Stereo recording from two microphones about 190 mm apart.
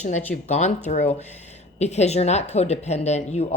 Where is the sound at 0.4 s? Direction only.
35° left (ahead or behind).